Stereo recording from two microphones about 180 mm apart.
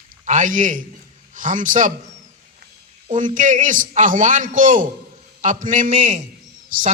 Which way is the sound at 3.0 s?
45° right (ahead or behind).